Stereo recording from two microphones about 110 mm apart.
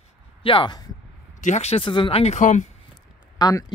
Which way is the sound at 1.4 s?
85° left.